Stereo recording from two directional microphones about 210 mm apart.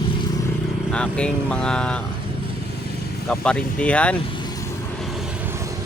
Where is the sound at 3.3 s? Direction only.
5° left (ahead or behind).